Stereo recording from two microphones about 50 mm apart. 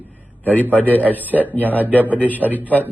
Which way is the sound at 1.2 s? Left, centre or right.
Right.